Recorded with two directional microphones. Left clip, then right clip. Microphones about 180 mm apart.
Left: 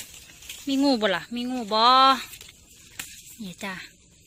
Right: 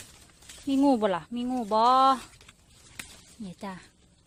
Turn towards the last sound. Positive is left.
turn(degrees=0)  # may be behind; listen again after turning